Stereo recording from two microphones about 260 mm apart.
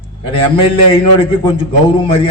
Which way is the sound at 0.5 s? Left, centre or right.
Centre.